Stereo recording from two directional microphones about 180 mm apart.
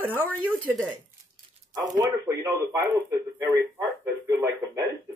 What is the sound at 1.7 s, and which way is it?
A man's voice, 20° right (ahead or behind).